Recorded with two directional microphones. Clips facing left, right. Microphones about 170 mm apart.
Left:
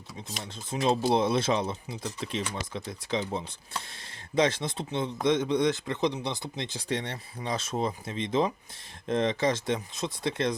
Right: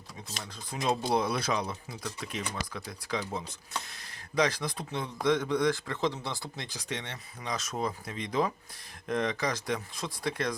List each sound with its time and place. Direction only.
0.7 s speech: 25° left (ahead or behind)